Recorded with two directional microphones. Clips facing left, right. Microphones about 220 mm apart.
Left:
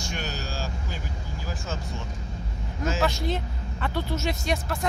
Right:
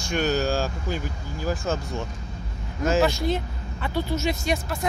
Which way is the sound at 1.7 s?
50° right (ahead or behind).